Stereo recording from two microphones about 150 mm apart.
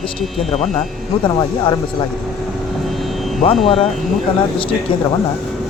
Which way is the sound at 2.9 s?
Centre (ahead or behind).